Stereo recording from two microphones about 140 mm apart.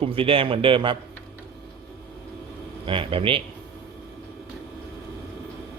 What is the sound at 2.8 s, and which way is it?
Speech, 40° right (ahead or behind).